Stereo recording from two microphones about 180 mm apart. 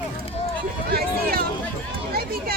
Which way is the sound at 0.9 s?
55° right (ahead or behind).